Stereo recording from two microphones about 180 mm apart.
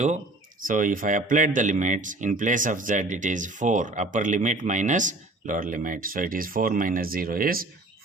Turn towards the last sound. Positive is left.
turn(degrees=-55)  # may be behind; listen again after turning